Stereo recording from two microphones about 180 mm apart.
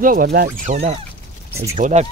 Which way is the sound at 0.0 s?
50° right (ahead or behind).